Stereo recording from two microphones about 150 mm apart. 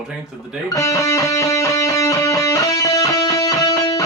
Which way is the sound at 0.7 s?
20° left (ahead or behind).